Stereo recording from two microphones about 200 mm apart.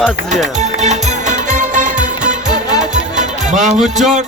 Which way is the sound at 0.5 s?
35° right (ahead or behind).